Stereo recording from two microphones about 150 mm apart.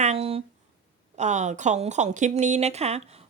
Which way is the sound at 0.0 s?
45° right (ahead or behind).